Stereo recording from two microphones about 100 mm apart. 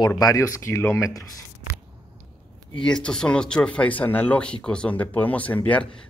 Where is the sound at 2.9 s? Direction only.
5° left (ahead or behind).